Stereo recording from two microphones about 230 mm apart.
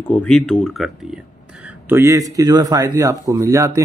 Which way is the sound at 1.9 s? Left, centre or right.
Centre.